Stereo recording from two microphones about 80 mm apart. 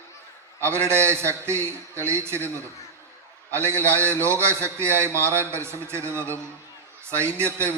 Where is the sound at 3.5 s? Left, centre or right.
Right.